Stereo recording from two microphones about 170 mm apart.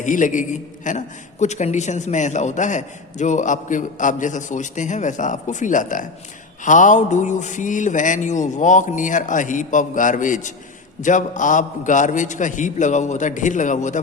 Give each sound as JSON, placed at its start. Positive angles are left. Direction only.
{"t": 0.0, "sound": "a man's voice", "side_deg": 50}